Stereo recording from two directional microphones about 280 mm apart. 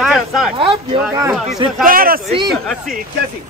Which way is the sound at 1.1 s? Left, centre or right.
Centre.